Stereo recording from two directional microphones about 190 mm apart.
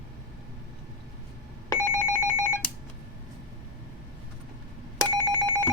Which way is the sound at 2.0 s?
15° left (ahead or behind).